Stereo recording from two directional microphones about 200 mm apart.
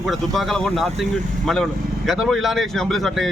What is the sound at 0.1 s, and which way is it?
Speech, centre (ahead or behind).